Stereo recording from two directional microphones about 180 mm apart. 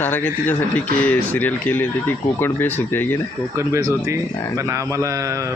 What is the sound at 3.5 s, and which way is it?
A man's voice, 15° right (ahead or behind).